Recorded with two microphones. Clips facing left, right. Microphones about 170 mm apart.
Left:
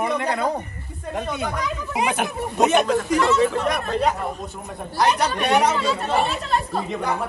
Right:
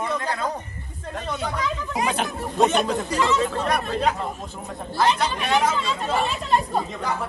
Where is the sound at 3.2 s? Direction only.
Centre (ahead or behind).